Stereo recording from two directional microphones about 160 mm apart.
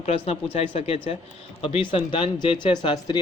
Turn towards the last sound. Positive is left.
turn(degrees=30)  # may be behind; listen again after turning